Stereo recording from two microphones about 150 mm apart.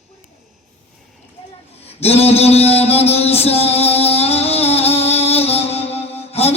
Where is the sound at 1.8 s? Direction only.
45° left (ahead or behind).